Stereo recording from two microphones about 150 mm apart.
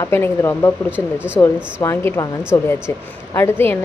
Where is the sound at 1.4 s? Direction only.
15° left (ahead or behind).